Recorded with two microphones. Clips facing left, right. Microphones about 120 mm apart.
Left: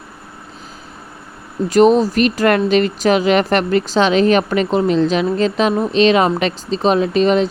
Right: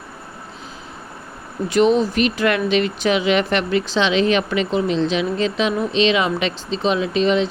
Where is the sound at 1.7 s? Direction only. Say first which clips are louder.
Left 4 dB; 40° left (ahead or behind).